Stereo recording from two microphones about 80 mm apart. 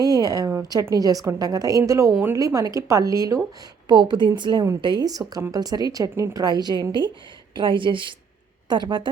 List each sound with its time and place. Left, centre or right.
0.0 s a woman's voice: right
3.8 s a woman's voice: right
6.1 s a woman's voice: right
6.4 s speech: right
7.5 s a woman's voice: right
8.7 s a woman's voice: right